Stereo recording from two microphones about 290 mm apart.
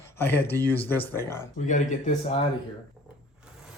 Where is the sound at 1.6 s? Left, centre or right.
Left.